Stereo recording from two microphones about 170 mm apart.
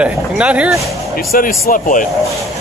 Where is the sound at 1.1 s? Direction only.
55° left (ahead or behind).